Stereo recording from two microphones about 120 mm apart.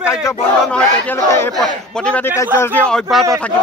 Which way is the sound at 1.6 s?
5° left (ahead or behind).